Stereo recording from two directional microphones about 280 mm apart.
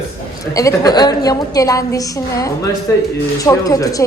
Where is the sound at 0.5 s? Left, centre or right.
Centre.